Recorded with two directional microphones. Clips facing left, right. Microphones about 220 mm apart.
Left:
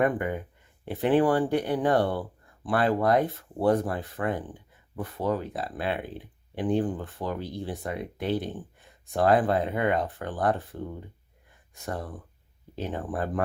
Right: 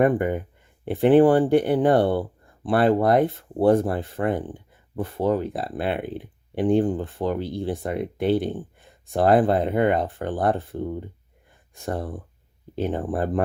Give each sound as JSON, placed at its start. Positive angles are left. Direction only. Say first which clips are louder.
{"t": 0.0, "sound": "speech", "louder": "right 6 dB", "side_deg": -30}